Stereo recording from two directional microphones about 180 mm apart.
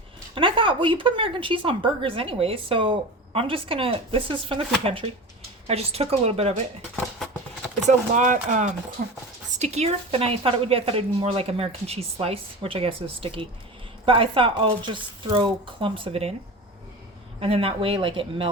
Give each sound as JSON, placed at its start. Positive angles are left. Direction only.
{"t": 0.3, "sound": "speech", "side_deg": -30}
{"t": 7.9, "sound": "speech", "side_deg": -45}
{"t": 17.4, "sound": "speech", "side_deg": -30}